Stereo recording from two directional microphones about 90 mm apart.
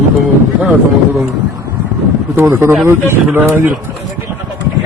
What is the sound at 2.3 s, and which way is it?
Speech, 25° right (ahead or behind).